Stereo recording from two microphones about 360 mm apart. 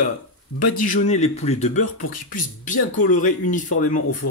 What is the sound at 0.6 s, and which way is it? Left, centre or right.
Speech, left.